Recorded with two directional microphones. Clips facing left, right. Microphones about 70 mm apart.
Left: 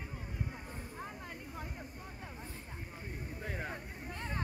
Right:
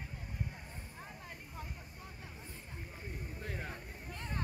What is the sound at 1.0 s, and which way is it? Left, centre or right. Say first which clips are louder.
Vehicle: left 4 dB; left.